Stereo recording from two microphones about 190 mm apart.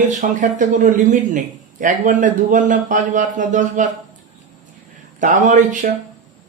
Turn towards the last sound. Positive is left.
turn(degrees=-40)  # may be behind; listen again after turning